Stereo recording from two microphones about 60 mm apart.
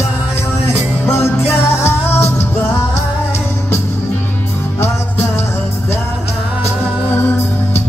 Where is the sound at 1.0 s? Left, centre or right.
Left.